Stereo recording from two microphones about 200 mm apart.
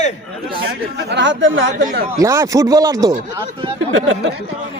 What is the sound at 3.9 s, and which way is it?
Speech, 65° right (ahead or behind).